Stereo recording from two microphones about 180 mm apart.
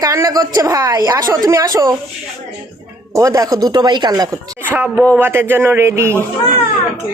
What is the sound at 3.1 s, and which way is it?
A woman's voice, 20° right (ahead or behind).